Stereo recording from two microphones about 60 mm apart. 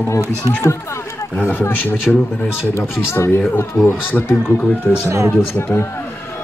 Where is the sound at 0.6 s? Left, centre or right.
Left.